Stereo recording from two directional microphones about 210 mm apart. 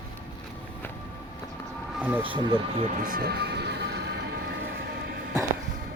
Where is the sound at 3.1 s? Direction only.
45° right (ahead or behind).